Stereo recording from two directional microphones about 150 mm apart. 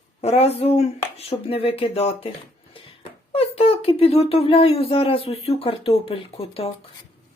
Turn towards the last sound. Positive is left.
turn(degrees=40)  # may be behind; listen again after turning